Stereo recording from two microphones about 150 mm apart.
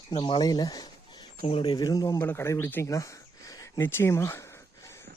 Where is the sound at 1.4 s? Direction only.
40° left (ahead or behind).